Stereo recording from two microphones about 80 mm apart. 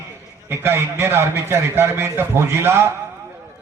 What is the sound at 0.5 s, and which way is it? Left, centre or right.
A man's voice, right.